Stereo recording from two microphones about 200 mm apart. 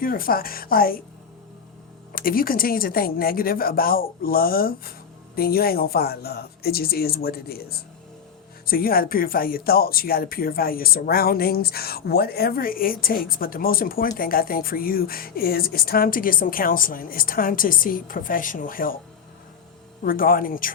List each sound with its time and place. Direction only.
0.0 s a woman's voice: 45° left (ahead or behind)
2.1 s a woman's voice: 45° left (ahead or behind)
20.1 s a woman's voice: 45° left (ahead or behind)